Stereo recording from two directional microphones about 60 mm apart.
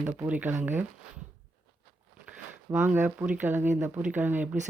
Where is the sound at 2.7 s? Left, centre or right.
Right.